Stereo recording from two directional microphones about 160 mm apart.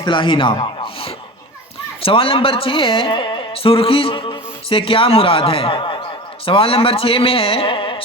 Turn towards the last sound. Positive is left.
turn(degrees=35)  # may be behind; listen again after turning